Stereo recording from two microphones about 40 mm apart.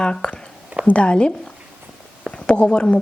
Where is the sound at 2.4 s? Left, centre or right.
Left.